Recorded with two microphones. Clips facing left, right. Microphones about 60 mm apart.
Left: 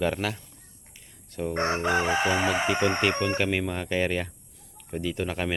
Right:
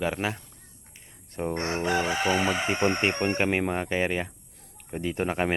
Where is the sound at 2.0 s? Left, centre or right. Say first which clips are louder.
Even; left.